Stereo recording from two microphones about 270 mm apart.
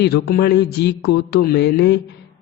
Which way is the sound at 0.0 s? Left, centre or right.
Left.